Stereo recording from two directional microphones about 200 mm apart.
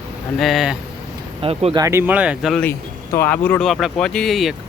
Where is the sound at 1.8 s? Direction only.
15° right (ahead or behind).